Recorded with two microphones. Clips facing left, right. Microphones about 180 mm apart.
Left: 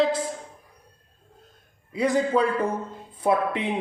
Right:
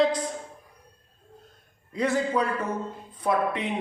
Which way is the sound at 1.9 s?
10° left (ahead or behind).